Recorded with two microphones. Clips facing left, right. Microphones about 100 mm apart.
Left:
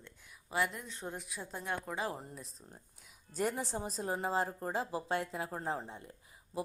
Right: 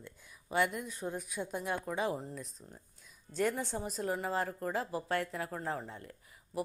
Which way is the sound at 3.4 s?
25° left (ahead or behind).